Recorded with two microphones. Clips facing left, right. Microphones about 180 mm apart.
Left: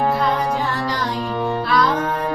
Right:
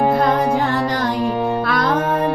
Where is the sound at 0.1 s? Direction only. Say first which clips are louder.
Right 4 dB; 50° right (ahead or behind).